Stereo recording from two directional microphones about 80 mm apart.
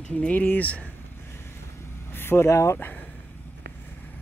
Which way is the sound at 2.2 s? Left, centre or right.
Left.